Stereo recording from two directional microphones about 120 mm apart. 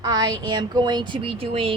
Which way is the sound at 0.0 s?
35° right (ahead or behind).